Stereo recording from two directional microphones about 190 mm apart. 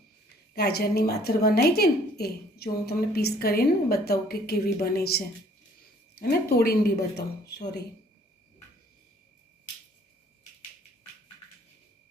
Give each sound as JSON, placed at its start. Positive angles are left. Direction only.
{"t": 0.5, "sound": "speech", "side_deg": 55}